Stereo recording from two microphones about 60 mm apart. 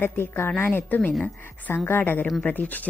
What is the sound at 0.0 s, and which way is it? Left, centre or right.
A woman's voice, left.